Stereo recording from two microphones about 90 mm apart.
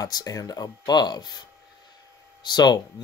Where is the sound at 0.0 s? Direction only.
40° left (ahead or behind).